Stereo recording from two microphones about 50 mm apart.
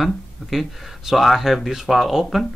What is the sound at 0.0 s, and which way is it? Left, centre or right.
Speech, centre.